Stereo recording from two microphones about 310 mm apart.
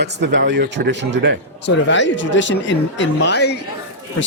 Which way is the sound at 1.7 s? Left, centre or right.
Left.